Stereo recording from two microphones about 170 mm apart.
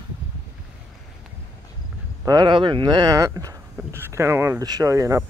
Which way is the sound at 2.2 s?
25° right (ahead or behind).